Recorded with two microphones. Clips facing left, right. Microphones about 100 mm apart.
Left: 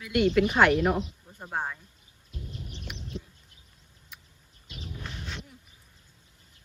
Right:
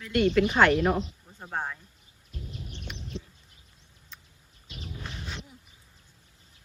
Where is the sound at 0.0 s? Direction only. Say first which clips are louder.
Even; 5° left (ahead or behind).